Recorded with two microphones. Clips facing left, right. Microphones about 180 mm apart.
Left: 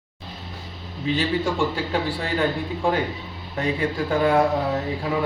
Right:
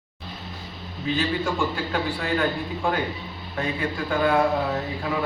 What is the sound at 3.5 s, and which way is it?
Speech, 30° left (ahead or behind).